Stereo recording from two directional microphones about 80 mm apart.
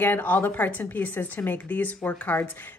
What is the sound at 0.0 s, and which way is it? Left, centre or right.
Speech, left.